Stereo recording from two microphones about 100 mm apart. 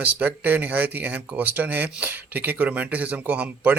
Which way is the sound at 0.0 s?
15° right (ahead or behind).